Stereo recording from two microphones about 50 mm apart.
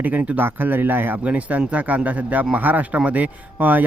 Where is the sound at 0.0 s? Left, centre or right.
Right.